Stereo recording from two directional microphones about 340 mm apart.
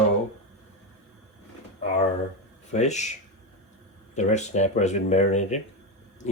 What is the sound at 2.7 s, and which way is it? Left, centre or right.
Speech, centre.